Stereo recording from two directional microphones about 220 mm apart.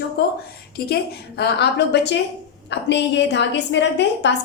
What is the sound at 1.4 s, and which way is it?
A woman's voice, 50° left (ahead or behind).